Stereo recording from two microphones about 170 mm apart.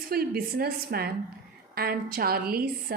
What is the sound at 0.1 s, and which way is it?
A woman's voice, 65° right (ahead or behind).